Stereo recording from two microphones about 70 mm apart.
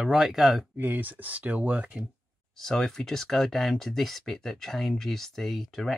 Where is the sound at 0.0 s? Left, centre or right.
Centre.